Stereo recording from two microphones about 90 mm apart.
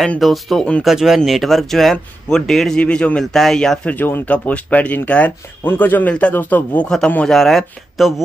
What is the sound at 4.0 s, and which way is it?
Speech, 20° left (ahead or behind).